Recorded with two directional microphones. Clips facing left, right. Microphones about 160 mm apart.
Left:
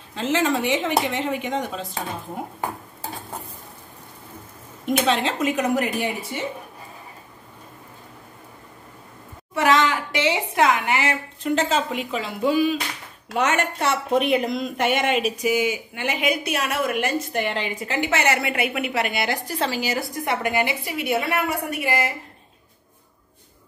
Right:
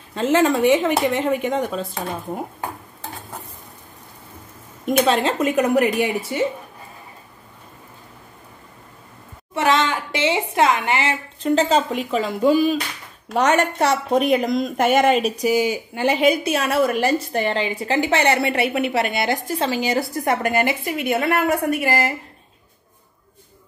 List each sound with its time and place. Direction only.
0.1 s speech: 50° right (ahead or behind)
4.8 s speech: 45° right (ahead or behind)
9.5 s a woman's voice: 25° right (ahead or behind)
20.2 s speech: 45° right (ahead or behind)